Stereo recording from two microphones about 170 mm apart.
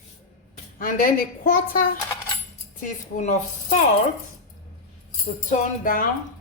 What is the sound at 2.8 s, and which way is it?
Speech, 45° left (ahead or behind).